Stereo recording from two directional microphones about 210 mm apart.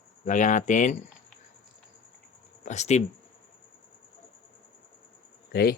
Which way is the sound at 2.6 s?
35° left (ahead or behind).